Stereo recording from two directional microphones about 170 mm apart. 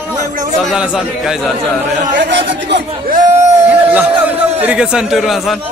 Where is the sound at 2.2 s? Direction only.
90° right.